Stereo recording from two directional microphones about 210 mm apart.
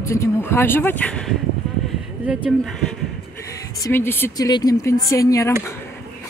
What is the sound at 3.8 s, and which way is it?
Speech, 10° left (ahead or behind).